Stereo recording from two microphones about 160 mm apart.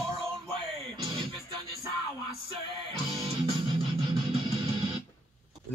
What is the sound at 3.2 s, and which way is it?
Music, 30° right (ahead or behind).